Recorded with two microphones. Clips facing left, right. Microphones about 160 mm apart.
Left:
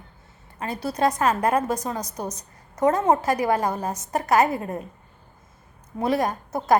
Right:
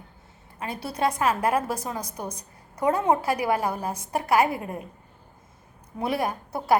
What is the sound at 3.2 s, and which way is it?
A woman's voice, 10° right (ahead or behind).